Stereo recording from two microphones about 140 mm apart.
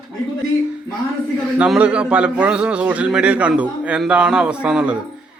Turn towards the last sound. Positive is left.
turn(degrees=-5)  # may be behind; listen again after turning